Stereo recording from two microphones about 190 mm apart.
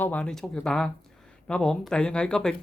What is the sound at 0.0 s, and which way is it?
Speech, 10° left (ahead or behind).